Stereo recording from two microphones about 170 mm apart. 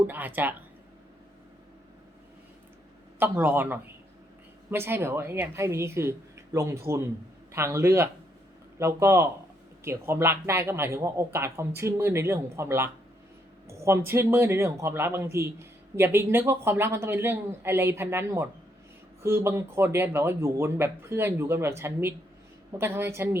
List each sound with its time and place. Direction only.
0.1 s a man's voice: 10° right (ahead or behind)
3.2 s a man's voice: 10° right (ahead or behind)